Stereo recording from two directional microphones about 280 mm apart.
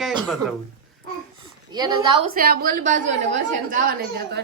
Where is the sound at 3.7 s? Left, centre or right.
Right.